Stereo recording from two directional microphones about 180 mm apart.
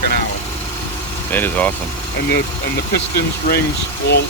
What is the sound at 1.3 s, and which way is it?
Speech, 10° left (ahead or behind).